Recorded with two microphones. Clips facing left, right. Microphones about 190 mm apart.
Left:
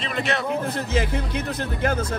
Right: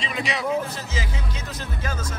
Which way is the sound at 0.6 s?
60° left (ahead or behind).